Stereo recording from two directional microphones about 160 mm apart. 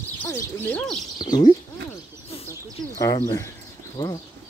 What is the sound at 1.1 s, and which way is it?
Speech, 25° left (ahead or behind).